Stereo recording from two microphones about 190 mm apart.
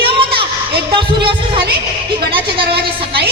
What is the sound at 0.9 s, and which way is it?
Speech, 25° right (ahead or behind).